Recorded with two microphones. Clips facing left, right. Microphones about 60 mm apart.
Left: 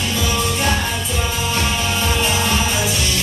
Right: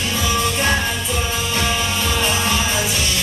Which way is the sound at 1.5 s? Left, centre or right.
Left.